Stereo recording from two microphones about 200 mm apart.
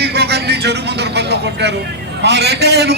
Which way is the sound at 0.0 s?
55° right (ahead or behind).